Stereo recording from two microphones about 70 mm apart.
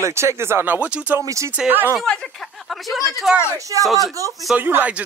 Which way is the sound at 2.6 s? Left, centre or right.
Centre.